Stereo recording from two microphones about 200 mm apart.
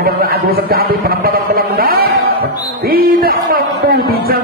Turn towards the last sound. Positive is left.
turn(degrees=-45)  # may be behind; listen again after turning